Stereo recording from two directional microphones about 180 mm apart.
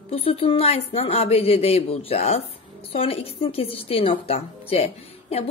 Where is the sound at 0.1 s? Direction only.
30° left (ahead or behind).